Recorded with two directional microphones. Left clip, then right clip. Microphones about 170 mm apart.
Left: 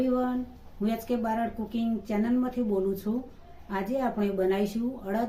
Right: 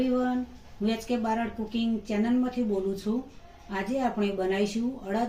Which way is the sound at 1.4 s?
20° left (ahead or behind).